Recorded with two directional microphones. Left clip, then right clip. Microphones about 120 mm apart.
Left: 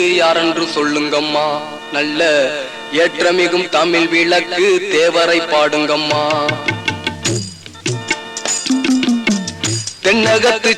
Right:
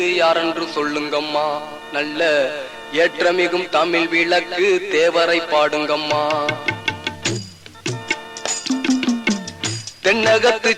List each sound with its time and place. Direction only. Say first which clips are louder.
0.0 s a man's voice: left 4 dB; 40° left (ahead or behind)
1.9 s a man's voice: left 4 dB; 35° left (ahead or behind)
7.0 s music: left 4 dB; 30° left (ahead or behind)